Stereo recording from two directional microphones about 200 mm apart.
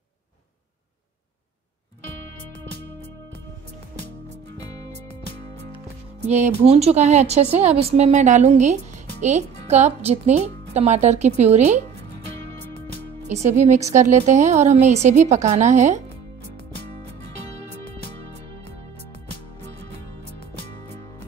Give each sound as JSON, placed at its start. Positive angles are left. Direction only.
{"t": 6.2, "sound": "a woman's voice", "side_deg": -35}
{"t": 13.3, "sound": "a woman's voice", "side_deg": -35}